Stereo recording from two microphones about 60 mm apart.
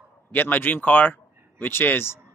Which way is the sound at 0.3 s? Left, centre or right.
Left.